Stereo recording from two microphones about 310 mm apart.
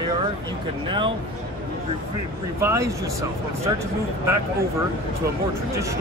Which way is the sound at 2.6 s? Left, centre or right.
Centre.